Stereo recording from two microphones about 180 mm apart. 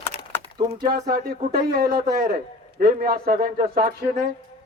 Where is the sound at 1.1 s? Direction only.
55° right (ahead or behind).